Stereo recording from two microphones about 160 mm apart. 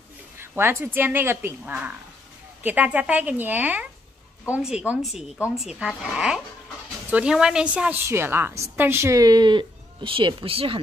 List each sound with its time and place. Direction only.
0.4 s a woman's voice: 15° right (ahead or behind); by 10.8 s 35° right (ahead or behind)